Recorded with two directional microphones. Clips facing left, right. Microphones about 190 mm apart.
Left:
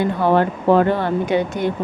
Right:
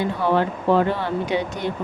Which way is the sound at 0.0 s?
55° left (ahead or behind).